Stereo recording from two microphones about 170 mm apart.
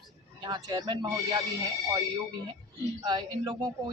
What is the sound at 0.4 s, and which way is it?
Speech, 25° right (ahead or behind).